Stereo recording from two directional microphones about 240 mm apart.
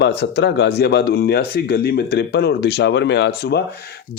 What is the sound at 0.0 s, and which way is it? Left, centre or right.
A man's voice, left.